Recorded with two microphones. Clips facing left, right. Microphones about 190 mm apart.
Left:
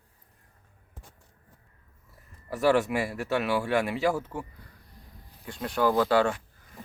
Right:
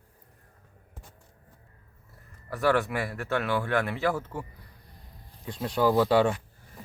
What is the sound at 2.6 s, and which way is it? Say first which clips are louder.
Speech: left 2 dB; 15° left (ahead or behind).